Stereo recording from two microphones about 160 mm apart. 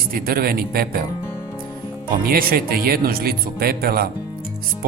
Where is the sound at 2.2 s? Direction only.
65° right (ahead or behind).